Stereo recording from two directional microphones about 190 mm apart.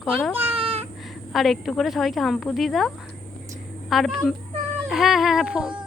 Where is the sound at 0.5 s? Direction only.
30° right (ahead or behind).